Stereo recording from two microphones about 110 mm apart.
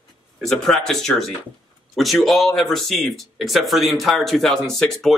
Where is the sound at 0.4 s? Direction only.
5° left (ahead or behind).